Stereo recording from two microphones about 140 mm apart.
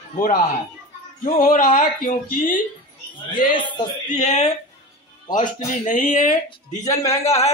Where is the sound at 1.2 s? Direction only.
90° left.